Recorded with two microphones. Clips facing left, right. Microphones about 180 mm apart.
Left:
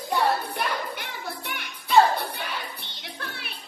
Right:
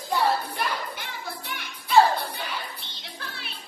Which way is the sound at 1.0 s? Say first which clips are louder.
Left 1 dB; 60° left (ahead or behind).